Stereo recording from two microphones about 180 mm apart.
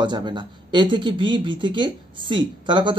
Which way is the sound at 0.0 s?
25° right (ahead or behind).